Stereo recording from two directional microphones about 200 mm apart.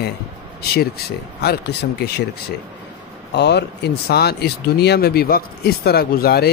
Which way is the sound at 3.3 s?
55° left (ahead or behind).